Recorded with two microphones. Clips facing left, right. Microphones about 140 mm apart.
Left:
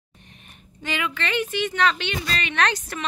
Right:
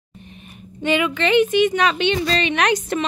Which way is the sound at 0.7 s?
20° right (ahead or behind).